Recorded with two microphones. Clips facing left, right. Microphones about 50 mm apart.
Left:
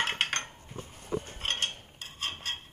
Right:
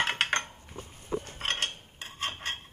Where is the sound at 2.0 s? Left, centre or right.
Right.